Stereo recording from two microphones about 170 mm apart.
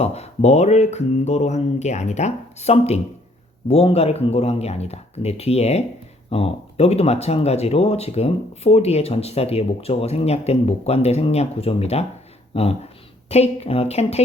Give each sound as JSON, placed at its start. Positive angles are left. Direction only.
{"t": 0.0, "sound": "speech", "side_deg": 40}